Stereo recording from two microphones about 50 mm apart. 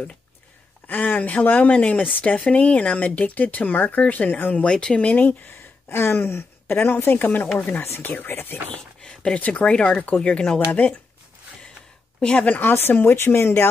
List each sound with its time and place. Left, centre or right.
0.8 s speech: left
4.6 s speech: centre
5.2 s a woman's voice: left
8.7 s a sound: centre
9.4 s speech: left
12.2 s speech: left
12.6 s a woman's voice: left